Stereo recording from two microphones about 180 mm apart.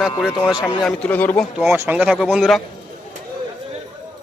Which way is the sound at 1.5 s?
15° right (ahead or behind).